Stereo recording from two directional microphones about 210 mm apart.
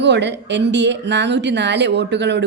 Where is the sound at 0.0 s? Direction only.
55° right (ahead or behind).